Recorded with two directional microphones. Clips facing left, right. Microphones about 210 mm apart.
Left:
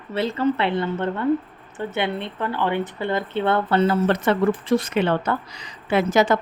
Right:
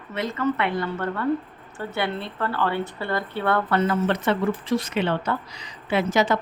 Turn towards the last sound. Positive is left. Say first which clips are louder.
# left 3 dB
turn(degrees=50)  # may be behind; listen again after turning